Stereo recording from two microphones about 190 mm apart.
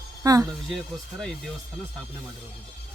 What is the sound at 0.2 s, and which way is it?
Speech, 15° right (ahead or behind).